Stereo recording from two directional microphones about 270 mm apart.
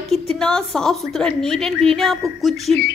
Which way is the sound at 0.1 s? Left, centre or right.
Centre.